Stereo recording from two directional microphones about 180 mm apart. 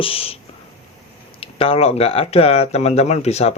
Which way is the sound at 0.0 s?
30° left (ahead or behind).